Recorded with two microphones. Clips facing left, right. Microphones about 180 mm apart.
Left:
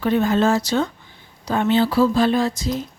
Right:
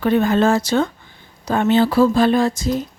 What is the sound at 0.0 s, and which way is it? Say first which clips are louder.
Speech: right 2 dB; 60° right (ahead or behind).